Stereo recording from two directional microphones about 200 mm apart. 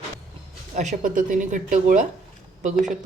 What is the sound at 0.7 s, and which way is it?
Speech, 35° right (ahead or behind).